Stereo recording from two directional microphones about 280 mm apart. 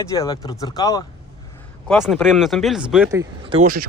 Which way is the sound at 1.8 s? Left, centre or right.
Centre.